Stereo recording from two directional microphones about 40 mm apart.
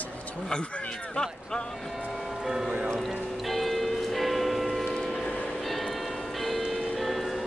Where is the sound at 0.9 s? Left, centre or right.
Centre.